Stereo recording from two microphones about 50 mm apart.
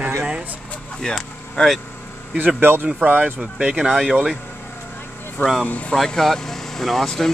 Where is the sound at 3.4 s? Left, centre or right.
Centre.